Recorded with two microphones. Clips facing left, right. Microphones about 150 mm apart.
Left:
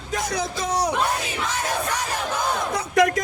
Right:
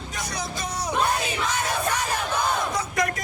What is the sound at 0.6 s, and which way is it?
Music, 75° left (ahead or behind).